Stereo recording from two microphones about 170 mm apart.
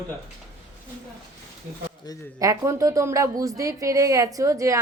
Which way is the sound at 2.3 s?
20° right (ahead or behind).